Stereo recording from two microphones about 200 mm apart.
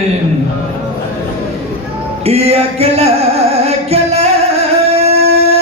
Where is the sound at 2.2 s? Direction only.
30° right (ahead or behind).